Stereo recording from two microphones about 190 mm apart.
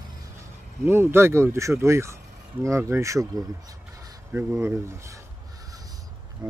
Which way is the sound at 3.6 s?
20° right (ahead or behind).